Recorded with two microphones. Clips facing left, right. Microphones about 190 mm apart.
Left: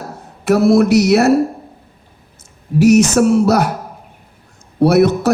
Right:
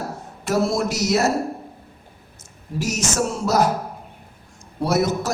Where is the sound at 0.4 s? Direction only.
65° left (ahead or behind).